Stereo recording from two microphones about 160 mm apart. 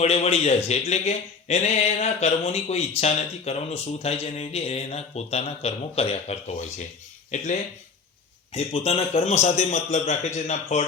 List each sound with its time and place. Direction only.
0.0 s a man's voice: 40° left (ahead or behind)
8.5 s a man's voice: 40° left (ahead or behind)